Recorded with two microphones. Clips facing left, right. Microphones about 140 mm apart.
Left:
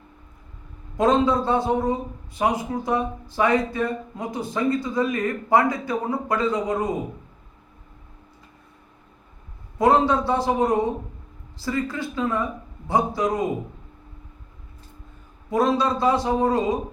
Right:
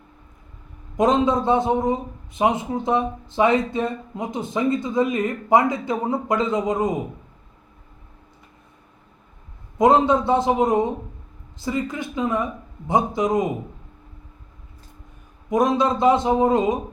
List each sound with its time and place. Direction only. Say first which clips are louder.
0.9 s a man's voice: right 1 dB; 20° right (ahead or behind)
9.7 s a man's voice: right 2 dB; 20° right (ahead or behind)
15.4 s a man's voice: right 2 dB; 20° right (ahead or behind)